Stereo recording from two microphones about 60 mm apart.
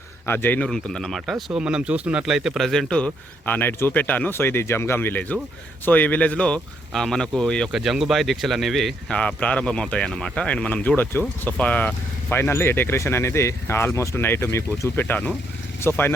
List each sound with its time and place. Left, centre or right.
0.3 s speech: left
0.6 s speech: centre
1.5 s speech: centre
1.9 s speech: right
2.2 s speech: centre
3.4 s speech: left
3.9 s speech: left
4.4 s speech: left; by 6.6 s centre
6.9 s speech: centre
7.7 s speech: centre
9.1 s speech: left
12.3 s speech: left